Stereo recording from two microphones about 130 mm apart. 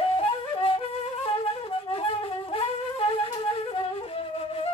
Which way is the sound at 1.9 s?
45° left (ahead or behind).